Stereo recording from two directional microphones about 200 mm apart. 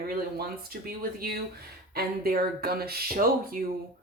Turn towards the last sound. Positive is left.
turn(degrees=-45)  # may be behind; listen again after turning